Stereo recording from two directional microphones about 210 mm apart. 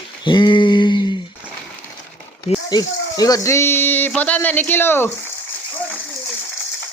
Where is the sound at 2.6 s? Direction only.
15° left (ahead or behind).